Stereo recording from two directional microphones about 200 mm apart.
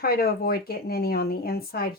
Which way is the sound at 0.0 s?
50° left (ahead or behind).